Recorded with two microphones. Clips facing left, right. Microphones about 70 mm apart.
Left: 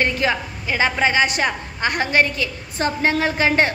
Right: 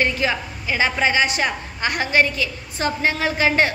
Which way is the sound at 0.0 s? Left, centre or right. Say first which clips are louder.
Left 1 dB; left.